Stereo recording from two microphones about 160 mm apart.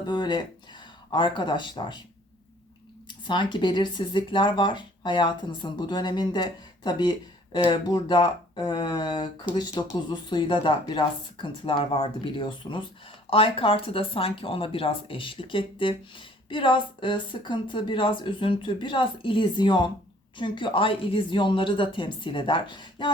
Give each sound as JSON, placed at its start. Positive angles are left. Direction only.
{"t": 0.0, "sound": "speech", "side_deg": 25}
{"t": 3.1, "sound": "speech", "side_deg": 30}